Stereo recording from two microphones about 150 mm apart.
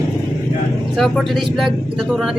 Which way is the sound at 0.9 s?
Centre (ahead or behind).